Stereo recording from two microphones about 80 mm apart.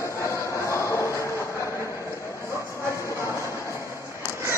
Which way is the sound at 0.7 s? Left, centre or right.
Left.